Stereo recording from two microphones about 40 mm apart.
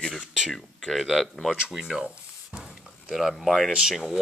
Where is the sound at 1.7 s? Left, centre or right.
Centre.